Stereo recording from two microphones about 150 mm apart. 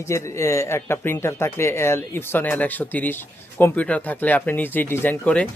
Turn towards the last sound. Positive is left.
turn(degrees=10)  # may be behind; listen again after turning